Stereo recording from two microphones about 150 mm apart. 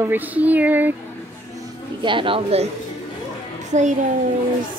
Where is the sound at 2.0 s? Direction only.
35° right (ahead or behind).